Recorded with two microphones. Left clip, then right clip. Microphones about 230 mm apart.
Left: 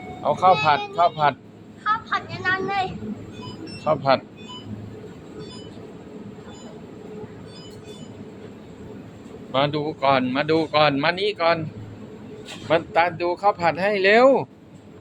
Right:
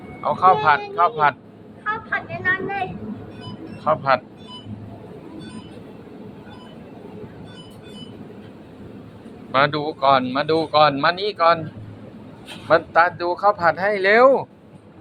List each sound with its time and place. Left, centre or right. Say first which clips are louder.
0.2 s speech: right 2 dB; left
1.8 s a sound: left 1 dB; centre
3.8 s speech: right 1 dB; left
9.5 s speech: right 4 dB; centre
12.6 s speech: right 4 dB; centre